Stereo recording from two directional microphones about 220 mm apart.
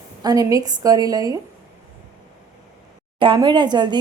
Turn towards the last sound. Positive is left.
turn(degrees=-20)  # may be behind; listen again after turning